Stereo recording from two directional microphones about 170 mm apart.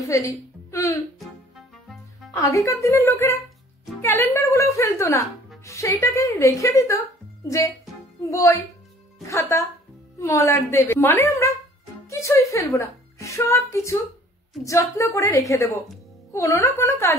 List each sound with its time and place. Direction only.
0.1 s a woman's voice: 20° left (ahead or behind)
2.4 s a woman's voice: 20° left (ahead or behind)